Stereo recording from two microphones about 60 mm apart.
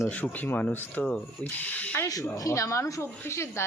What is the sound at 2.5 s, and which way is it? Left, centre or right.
A woman's voice, left.